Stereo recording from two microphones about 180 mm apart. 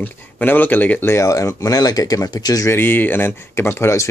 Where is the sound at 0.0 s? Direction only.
10° left (ahead or behind).